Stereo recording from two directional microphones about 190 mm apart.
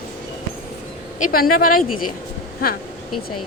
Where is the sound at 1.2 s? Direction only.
50° left (ahead or behind).